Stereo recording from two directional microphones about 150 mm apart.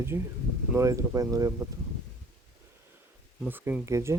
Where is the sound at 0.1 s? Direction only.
15° right (ahead or behind).